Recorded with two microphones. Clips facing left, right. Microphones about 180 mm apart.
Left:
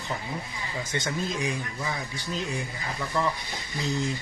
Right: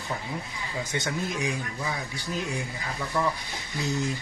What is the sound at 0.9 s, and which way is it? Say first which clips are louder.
Speech: left 1 dB; 10° right (ahead or behind).